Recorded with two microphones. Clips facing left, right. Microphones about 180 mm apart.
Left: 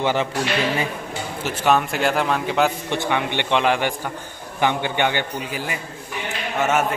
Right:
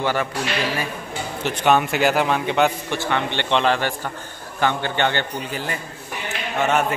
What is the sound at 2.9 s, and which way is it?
A man's voice, 15° left (ahead or behind).